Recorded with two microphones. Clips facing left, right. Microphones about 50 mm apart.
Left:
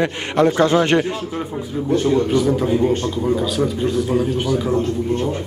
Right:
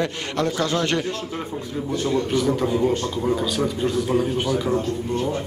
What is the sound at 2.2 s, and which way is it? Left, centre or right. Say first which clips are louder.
A man's voice: left 4 dB; centre.